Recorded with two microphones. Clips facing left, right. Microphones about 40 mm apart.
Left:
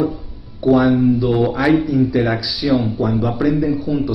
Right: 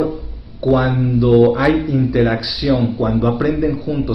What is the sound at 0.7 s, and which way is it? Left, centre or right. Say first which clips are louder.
A man's voice: left 3 dB; centre.